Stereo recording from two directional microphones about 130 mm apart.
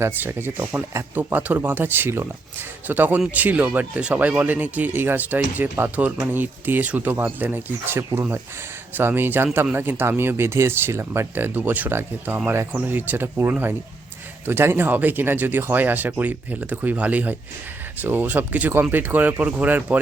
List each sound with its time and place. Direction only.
0.0 s speech: 15° right (ahead or behind)